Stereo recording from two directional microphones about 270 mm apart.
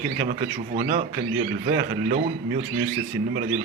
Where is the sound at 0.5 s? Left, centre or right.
Right.